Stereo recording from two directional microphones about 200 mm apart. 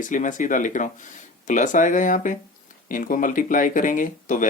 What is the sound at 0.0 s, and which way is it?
Speech, 40° left (ahead or behind).